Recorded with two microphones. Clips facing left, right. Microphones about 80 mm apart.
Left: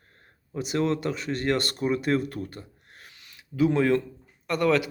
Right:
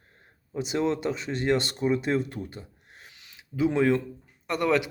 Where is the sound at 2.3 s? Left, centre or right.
Centre.